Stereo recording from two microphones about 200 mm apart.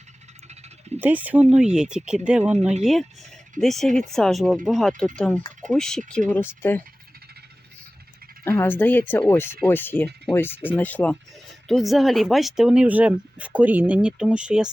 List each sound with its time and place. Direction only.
0.9 s speech: 10° right (ahead or behind)
2.5 s speech: 35° right (ahead or behind)
2.8 s speech: centre (ahead or behind)
8.4 s speech: 10° left (ahead or behind); by 14.7 s 5° right (ahead or behind)